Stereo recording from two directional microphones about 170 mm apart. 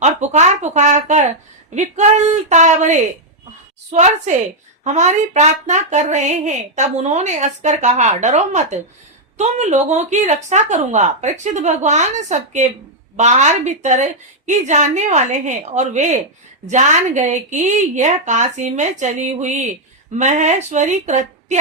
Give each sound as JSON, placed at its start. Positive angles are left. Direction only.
{"t": 0.0, "sound": "speech", "side_deg": -40}